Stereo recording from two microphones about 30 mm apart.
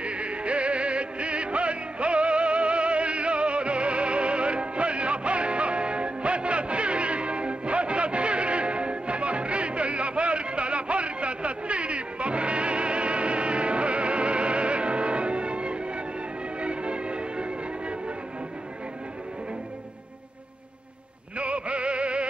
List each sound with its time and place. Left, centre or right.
0.0 s music: right
21.4 s music: right